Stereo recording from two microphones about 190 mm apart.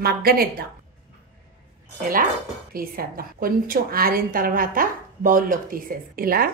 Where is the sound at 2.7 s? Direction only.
50° right (ahead or behind).